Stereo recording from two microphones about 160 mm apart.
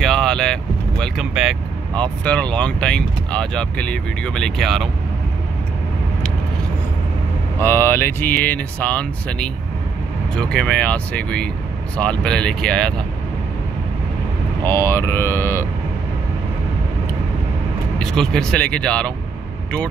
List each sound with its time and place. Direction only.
0.0 s vehicle: centre (ahead or behind)
2.0 s speech: 5° left (ahead or behind)
7.5 s speech: 15° left (ahead or behind)
14.7 s speech: 15° left (ahead or behind)
17.9 s speech: 5° left (ahead or behind)